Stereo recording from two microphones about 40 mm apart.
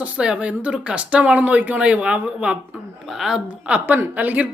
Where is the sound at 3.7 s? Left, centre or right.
Right.